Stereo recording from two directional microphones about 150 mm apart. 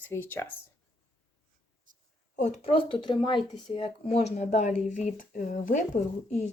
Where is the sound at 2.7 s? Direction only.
35° left (ahead or behind); by 5.8 s 60° left (ahead or behind).